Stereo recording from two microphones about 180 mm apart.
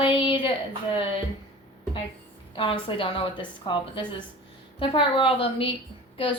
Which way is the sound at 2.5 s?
30° left (ahead or behind).